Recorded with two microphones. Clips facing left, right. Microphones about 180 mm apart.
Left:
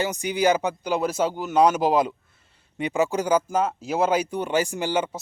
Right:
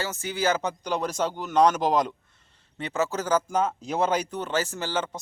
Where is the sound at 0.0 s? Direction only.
15° left (ahead or behind).